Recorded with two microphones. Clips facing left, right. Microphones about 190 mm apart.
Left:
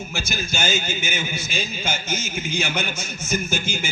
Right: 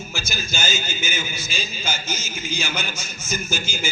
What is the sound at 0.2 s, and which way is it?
A man's voice, 60° left (ahead or behind).